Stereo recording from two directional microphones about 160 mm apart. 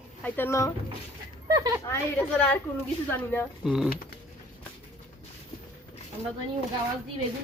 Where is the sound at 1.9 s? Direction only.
15° left (ahead or behind).